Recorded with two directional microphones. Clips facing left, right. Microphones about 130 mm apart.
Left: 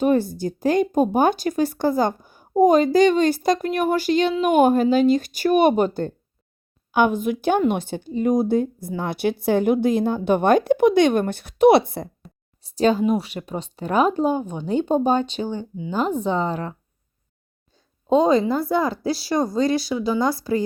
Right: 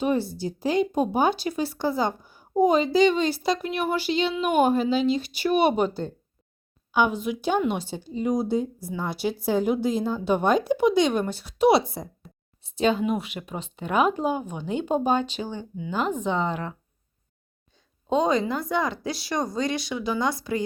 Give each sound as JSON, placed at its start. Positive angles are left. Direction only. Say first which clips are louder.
{"t": 0.0, "sound": "speech", "louder": "left 5 dB", "side_deg": 50}
{"t": 12.2, "sound": "a sound", "louder": "left 3 dB", "side_deg": 0}
{"t": 12.6, "sound": "speech", "louder": "left 4 dB", "side_deg": 40}
{"t": 18.1, "sound": "speech", "louder": "left 6 dB", "side_deg": 35}